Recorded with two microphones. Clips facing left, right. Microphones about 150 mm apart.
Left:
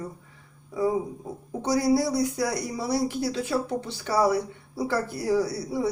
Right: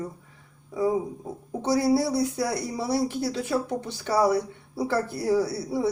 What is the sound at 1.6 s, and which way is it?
Speech, 30° right (ahead or behind).